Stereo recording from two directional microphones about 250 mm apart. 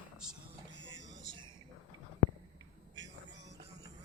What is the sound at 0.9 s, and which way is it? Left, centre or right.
Music, centre.